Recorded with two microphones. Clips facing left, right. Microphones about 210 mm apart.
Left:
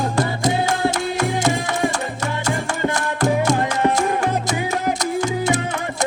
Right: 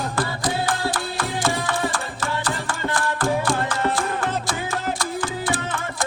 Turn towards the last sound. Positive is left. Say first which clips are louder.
# left 6 dB
turn(degrees=20)  # may be behind; listen again after turning